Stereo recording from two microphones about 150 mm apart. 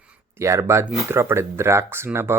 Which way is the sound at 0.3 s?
20° right (ahead or behind).